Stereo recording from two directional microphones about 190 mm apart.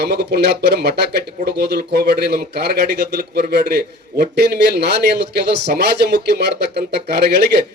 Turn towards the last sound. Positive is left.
turn(degrees=-60)  # may be behind; listen again after turning